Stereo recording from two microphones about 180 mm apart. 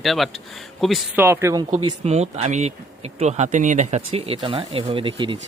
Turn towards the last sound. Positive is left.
turn(degrees=-25)  # may be behind; listen again after turning